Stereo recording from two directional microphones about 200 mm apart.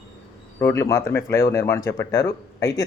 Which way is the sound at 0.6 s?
15° left (ahead or behind).